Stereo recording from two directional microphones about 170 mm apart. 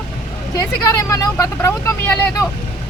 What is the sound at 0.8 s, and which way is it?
Speech, 20° left (ahead or behind).